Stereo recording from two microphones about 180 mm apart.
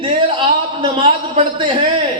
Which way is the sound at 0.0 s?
30° right (ahead or behind).